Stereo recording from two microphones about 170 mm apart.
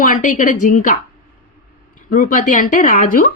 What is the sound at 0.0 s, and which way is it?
Speech, 50° left (ahead or behind).